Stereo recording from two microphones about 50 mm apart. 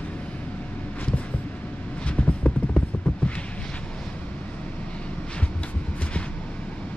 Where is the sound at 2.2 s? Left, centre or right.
Left.